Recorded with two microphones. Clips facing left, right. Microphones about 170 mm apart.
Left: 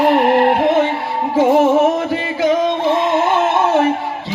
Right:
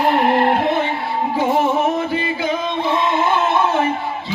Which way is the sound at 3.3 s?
75° left (ahead or behind).